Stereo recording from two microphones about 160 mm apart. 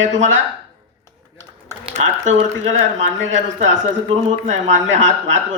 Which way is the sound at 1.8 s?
45° right (ahead or behind).